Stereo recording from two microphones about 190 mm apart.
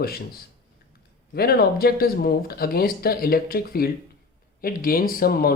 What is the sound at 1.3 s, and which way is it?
Speech, 55° left (ahead or behind).